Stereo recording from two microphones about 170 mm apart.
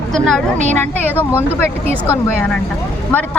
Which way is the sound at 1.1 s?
10° left (ahead or behind).